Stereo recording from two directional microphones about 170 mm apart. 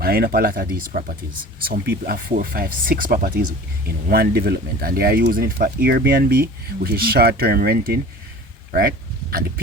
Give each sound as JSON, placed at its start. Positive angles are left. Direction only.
{"t": 0.0, "sound": "speech", "side_deg": -65}